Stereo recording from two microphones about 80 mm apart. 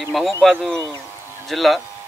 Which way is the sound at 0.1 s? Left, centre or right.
Centre.